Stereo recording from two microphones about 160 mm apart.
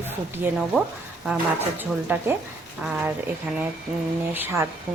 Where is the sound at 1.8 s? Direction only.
10° right (ahead or behind).